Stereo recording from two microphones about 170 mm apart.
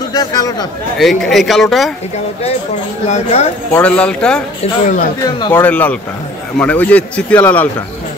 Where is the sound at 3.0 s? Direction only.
40° left (ahead or behind).